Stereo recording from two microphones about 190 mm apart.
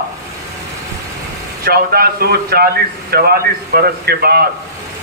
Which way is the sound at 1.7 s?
55° right (ahead or behind).